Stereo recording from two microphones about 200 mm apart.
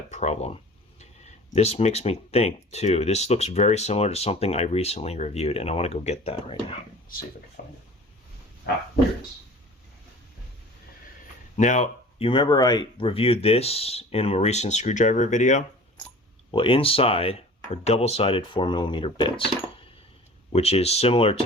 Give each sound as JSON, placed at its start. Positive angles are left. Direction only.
{"t": 0.1, "sound": "speech", "side_deg": 35}
{"t": 7.1, "sound": "speech", "side_deg": 45}
{"t": 11.5, "sound": "speech", "side_deg": 35}
{"t": 16.5, "sound": "speech", "side_deg": 25}
{"t": 20.5, "sound": "speech", "side_deg": 30}